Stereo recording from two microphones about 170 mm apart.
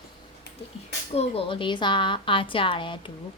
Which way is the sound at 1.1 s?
35° left (ahead or behind).